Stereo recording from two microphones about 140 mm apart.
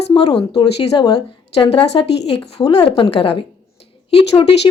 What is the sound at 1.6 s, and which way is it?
A woman's voice, 45° left (ahead or behind).